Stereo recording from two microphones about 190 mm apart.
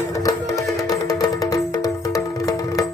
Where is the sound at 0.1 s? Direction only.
15° left (ahead or behind).